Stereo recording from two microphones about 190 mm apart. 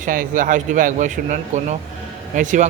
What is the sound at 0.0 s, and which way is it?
Speech, 45° right (ahead or behind).